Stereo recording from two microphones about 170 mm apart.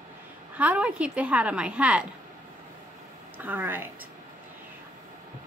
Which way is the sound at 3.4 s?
10° right (ahead or behind).